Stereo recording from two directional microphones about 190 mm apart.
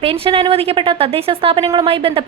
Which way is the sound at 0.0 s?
30° right (ahead or behind).